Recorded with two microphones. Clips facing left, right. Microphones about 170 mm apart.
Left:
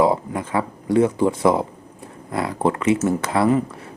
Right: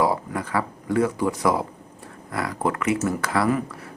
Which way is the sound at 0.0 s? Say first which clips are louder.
Left 4 dB; 20° left (ahead or behind).